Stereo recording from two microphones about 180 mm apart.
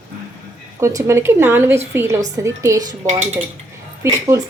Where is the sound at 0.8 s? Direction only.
20° right (ahead or behind).